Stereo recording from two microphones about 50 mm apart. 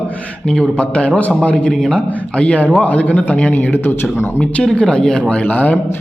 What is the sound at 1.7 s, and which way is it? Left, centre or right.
Speech, centre.